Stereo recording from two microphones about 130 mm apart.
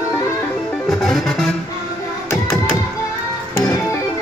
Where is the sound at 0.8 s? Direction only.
Centre (ahead or behind).